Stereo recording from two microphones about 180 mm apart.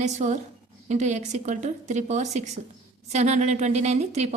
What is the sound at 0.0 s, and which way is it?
A woman's voice, 40° right (ahead or behind).